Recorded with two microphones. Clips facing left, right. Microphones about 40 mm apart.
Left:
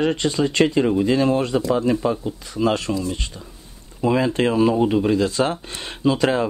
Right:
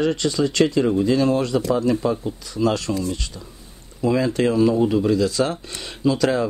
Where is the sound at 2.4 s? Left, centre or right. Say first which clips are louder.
Left 1 dB; left.